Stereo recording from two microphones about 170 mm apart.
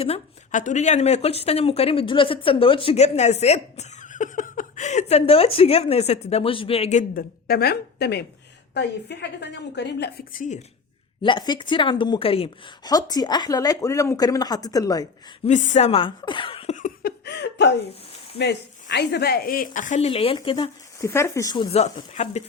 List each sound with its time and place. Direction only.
0.0 s speech: 40° left (ahead or behind)
7.2 s a woman's voice: 60° left (ahead or behind)
11.2 s speech: 25° left (ahead or behind)
12.9 s speech: 20° left (ahead or behind)
15.4 s speech: 40° left (ahead or behind)
16.7 s laughter: 55° left (ahead or behind); by 17.7 s 85° left
18.3 s speech: 85° left; by 20.7 s 30° left (ahead or behind)
21.0 s speech: 15° left (ahead or behind); by 22.4 s 45° left (ahead or behind)